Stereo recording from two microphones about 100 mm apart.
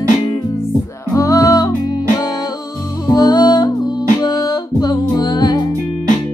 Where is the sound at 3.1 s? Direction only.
40° left (ahead or behind).